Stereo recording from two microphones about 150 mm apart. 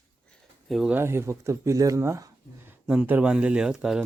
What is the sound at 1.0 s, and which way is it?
Speech, 15° right (ahead or behind).